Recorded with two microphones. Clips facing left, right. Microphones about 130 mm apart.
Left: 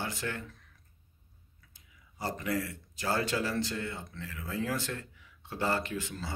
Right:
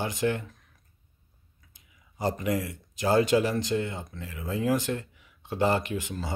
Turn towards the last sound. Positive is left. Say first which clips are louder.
# right 4 dB
turn(degrees=-15)  # may be behind; listen again after turning